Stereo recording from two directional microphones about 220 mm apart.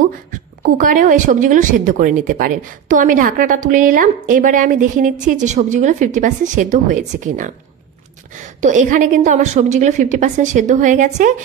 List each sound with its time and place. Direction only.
0.3 s speech: 35° right (ahead or behind)
8.5 s speech: 35° right (ahead or behind)